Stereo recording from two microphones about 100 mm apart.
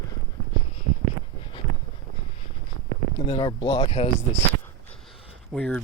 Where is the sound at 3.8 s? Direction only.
90° left.